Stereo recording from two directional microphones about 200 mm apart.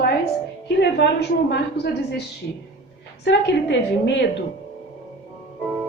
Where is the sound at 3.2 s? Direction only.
60° left (ahead or behind).